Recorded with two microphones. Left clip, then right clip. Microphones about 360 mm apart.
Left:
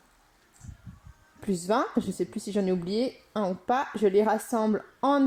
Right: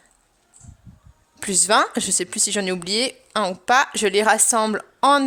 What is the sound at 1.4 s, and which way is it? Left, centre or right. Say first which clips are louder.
A man's voice: right 9 dB; right.